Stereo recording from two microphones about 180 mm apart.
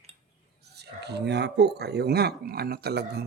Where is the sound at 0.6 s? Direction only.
65° right (ahead or behind).